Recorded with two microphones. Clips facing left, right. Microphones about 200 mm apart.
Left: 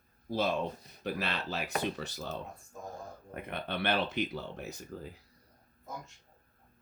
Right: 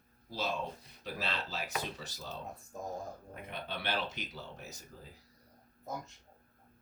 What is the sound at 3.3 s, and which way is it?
Speech, 60° left (ahead or behind).